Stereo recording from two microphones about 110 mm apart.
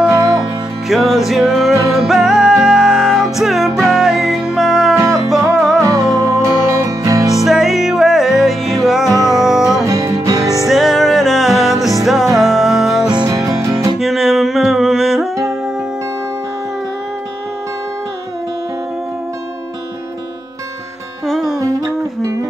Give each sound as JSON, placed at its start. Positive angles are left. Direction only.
{"t": 0.8, "sound": "music", "side_deg": 0}
{"t": 4.9, "sound": "music", "side_deg": -25}
{"t": 5.3, "sound": "music", "side_deg": 0}
{"t": 5.8, "sound": "music", "side_deg": -30}
{"t": 7.4, "sound": "music", "side_deg": 0}
{"t": 9.1, "sound": "music", "side_deg": 30}
{"t": 9.8, "sound": "music", "side_deg": -30}
{"t": 10.6, "sound": "music", "side_deg": 0}
{"t": 13.1, "sound": "music", "side_deg": -40}
{"t": 13.4, "sound": "music", "side_deg": -30}
{"t": 13.9, "sound": "music", "side_deg": 0}
{"t": 21.3, "sound": "music", "side_deg": 0}